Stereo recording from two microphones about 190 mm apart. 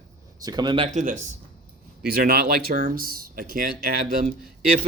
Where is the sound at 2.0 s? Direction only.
55° right (ahead or behind).